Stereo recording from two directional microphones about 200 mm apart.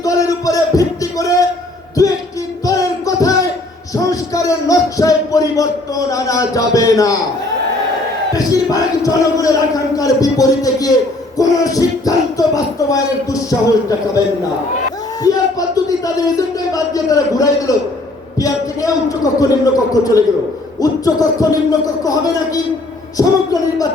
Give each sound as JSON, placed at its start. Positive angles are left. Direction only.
{"t": 0.0, "sound": "music", "side_deg": 15}
{"t": 2.0, "sound": "a sound", "side_deg": 15}
{"t": 2.6, "sound": "music", "side_deg": 15}
{"t": 6.1, "sound": "a man's voice", "side_deg": 15}
{"t": 8.4, "sound": "a man's voice", "side_deg": 15}
{"t": 15.2, "sound": "music", "side_deg": 20}
{"t": 16.7, "sound": "a man's voice", "side_deg": 15}